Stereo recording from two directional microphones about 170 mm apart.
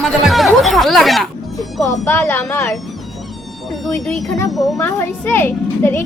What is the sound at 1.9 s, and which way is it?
Speech, 15° left (ahead or behind).